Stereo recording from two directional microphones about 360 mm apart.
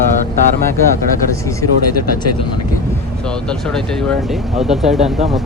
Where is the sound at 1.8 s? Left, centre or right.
Left.